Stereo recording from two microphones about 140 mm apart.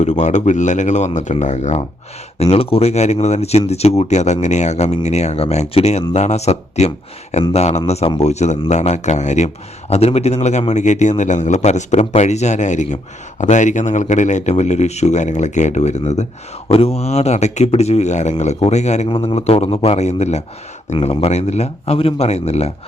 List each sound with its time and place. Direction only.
0.0 s speech: 55° left (ahead or behind)
2.4 s speech: 45° left (ahead or behind)
19.0 s speech: 40° left (ahead or behind)